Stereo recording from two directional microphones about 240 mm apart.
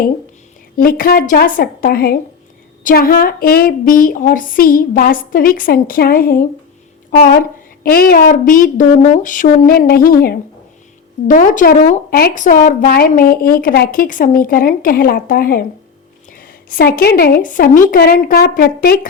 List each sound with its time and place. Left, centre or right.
0.8 s a woman's voice: left